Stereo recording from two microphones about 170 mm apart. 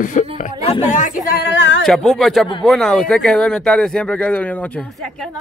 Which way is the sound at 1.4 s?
90° left.